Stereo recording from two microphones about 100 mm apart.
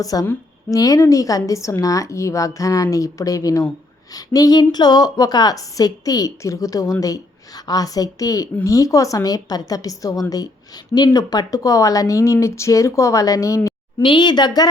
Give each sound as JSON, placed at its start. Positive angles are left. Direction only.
{"t": 0.0, "sound": "a woman's voice", "side_deg": 35}
{"t": 14.0, "sound": "a woman's voice", "side_deg": 50}